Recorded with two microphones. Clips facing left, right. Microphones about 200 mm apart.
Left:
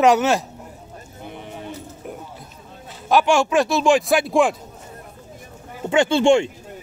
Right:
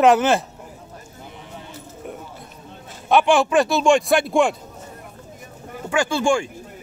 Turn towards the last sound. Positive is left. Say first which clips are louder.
# left 5 dB
turn(degrees=25)  # may be behind; listen again after turning